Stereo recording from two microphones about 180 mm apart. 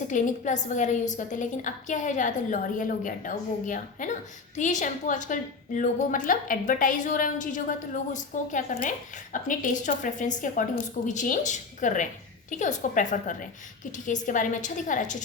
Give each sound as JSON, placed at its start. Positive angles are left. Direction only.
{"t": 0.1, "sound": "a woman's voice", "side_deg": 45}